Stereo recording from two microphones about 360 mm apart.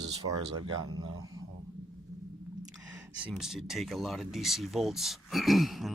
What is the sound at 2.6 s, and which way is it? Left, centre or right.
Speech, centre.